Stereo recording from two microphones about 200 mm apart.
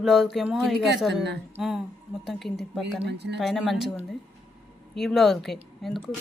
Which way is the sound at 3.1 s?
60° right (ahead or behind).